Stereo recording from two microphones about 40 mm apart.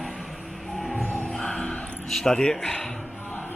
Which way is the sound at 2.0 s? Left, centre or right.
Centre.